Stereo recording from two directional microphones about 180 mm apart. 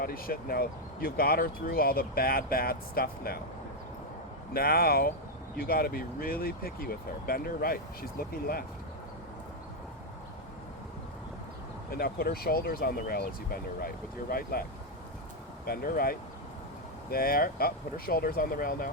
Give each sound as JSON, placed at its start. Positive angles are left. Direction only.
{"t": 0.0, "sound": "speech", "side_deg": 55}
{"t": 4.5, "sound": "speech", "side_deg": 55}
{"t": 11.9, "sound": "speech", "side_deg": 55}
{"t": 15.6, "sound": "speech", "side_deg": 55}